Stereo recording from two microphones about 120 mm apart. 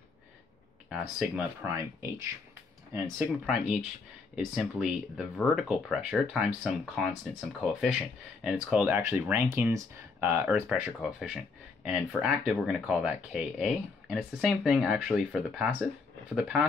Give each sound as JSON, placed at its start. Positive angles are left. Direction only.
{"t": 0.8, "sound": "speech", "side_deg": -5}
{"t": 1.6, "sound": "speech", "side_deg": -20}
{"t": 3.3, "sound": "speech", "side_deg": 0}
{"t": 8.9, "sound": "speech", "side_deg": -20}
{"t": 10.5, "sound": "speech", "side_deg": -5}